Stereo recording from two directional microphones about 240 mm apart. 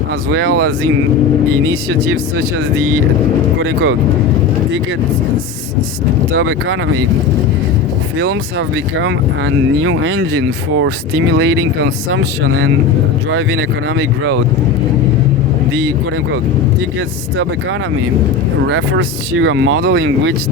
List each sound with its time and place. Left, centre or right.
0.3 s speech: right
3.6 s speech: right
6.3 s speech: right
8.2 s speech: right
18.7 s speech: right